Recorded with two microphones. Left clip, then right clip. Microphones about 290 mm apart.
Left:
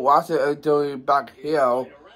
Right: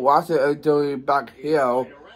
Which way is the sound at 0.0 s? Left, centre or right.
Centre.